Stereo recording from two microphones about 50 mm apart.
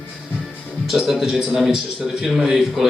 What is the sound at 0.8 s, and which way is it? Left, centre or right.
A man's voice, centre.